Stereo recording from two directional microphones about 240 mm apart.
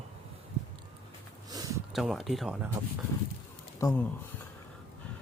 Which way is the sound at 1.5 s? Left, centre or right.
Centre.